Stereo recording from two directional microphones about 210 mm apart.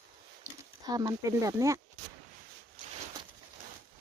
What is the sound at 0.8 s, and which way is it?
Speech, 15° right (ahead or behind).